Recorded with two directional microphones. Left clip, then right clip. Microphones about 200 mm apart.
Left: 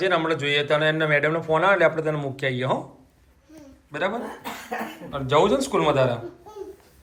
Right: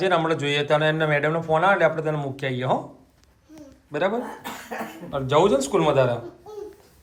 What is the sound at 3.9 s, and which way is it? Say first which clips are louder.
Speech: right 2 dB; 25° right (ahead or behind).